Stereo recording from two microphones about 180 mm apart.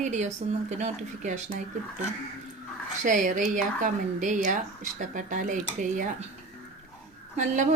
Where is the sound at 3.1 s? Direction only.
45° right (ahead or behind).